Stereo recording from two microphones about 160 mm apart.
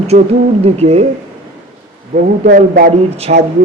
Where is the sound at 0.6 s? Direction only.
40° right (ahead or behind).